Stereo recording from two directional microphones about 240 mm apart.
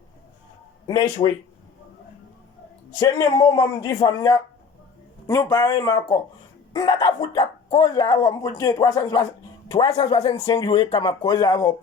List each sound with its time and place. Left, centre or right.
0.9 s speech: centre
3.0 s speech: centre
9.9 s speech: left
10.4 s speech: centre